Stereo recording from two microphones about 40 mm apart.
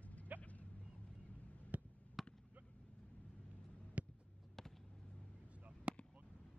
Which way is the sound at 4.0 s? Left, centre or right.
Right.